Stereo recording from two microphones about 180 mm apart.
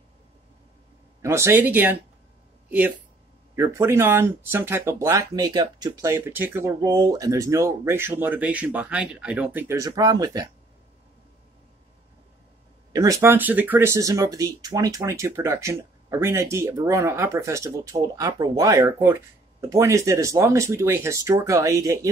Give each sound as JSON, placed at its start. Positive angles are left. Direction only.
{"t": 1.2, "sound": "speech", "side_deg": -15}
{"t": 3.5, "sound": "speech", "side_deg": -15}
{"t": 12.9, "sound": "speech", "side_deg": -20}